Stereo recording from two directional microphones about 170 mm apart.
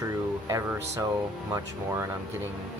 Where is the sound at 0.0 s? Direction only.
20° right (ahead or behind).